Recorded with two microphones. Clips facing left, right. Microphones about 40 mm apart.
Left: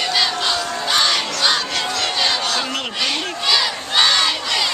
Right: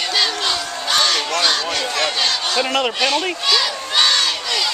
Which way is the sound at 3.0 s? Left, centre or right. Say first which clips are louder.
Right 3 dB; centre.